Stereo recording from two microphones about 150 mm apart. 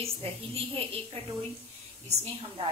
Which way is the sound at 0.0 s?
40° right (ahead or behind).